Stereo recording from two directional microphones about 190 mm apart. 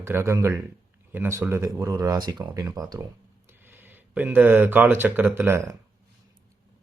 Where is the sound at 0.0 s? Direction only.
15° right (ahead or behind).